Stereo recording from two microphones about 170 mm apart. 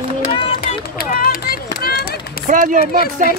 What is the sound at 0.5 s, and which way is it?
Run, 60° left (ahead or behind).